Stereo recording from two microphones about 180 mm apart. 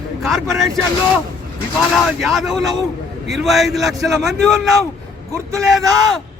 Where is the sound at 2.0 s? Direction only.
Centre (ahead or behind).